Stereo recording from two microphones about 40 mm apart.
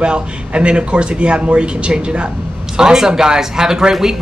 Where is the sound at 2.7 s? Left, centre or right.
Centre.